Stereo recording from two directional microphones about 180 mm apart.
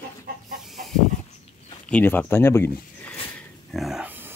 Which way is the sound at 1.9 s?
10° left (ahead or behind).